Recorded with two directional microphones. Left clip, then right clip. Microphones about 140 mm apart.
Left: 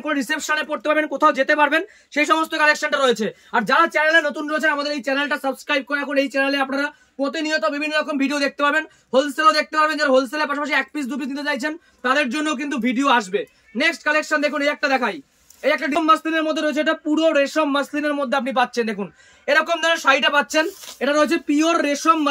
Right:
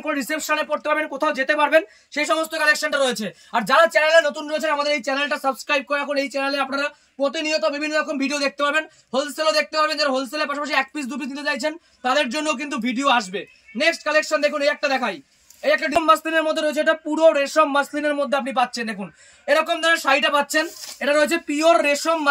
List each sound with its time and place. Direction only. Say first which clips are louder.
0.0 s a man's voice: left 2 dB; 10° left (ahead or behind)
3.5 s speech: right 1 dB; centre (ahead or behind)
7.2 s a man's voice: even; 10° left (ahead or behind)
7.8 s speech: left 1 dB; 45° left (ahead or behind)
8.1 s a man's voice: left 1 dB; 10° left (ahead or behind)